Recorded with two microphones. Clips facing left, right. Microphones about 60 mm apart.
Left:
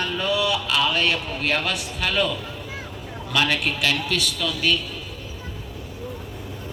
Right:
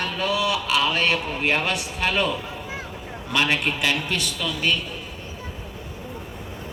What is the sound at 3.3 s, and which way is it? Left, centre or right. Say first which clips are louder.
A man's voice: even; right.